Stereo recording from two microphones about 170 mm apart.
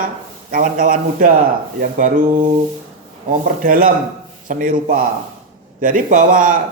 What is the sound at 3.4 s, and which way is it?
Speech, 55° right (ahead or behind).